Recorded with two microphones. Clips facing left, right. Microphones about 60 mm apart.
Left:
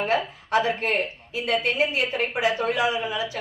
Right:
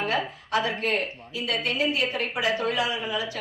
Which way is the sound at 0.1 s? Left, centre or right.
Left.